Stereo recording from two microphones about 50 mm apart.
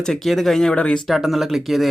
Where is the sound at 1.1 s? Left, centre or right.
Centre.